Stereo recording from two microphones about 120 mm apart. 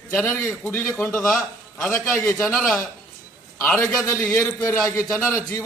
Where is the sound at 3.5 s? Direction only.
15° left (ahead or behind).